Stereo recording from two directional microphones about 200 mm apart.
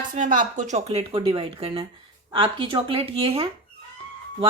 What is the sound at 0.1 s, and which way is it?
A woman's voice, 40° right (ahead or behind).